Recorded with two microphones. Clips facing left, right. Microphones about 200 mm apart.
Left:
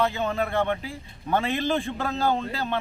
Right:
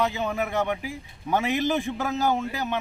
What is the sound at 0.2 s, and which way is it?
A man's voice, 15° right (ahead or behind).